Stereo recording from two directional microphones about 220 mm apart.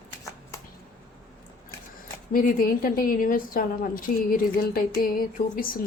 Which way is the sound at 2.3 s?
40° left (ahead or behind).